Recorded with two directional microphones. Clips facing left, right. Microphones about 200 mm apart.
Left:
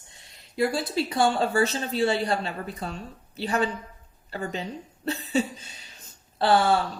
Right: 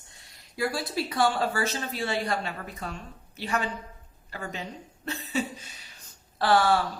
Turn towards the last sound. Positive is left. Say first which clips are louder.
# left 2 dB
turn(degrees=25)  # may be behind; listen again after turning